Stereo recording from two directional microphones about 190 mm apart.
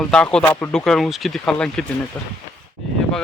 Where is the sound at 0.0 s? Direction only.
5° left (ahead or behind).